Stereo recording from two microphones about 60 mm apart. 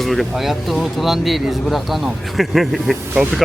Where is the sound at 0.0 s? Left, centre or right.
Centre.